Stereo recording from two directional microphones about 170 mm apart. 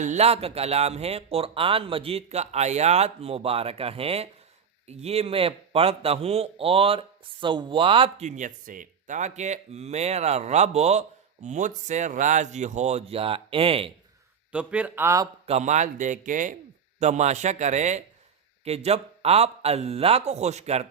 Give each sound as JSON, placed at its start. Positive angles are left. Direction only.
{"t": 0.0, "sound": "speech", "side_deg": -40}
{"t": 8.3, "sound": "speech", "side_deg": -50}
{"t": 14.5, "sound": "speech", "side_deg": -10}
{"t": 15.4, "sound": "speech", "side_deg": -40}